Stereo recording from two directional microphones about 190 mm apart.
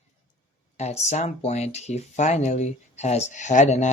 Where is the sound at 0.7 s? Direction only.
35° left (ahead or behind).